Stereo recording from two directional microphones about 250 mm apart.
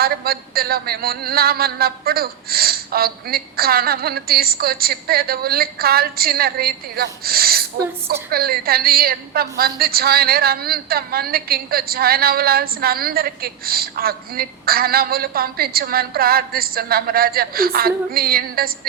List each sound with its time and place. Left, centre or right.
0.0 s a woman's voice: right